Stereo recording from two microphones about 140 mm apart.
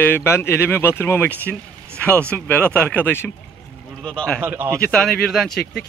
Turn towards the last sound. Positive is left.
turn(degrees=5)  # may be behind; listen again after turning